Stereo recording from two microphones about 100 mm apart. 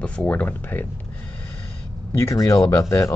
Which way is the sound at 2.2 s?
30° left (ahead or behind).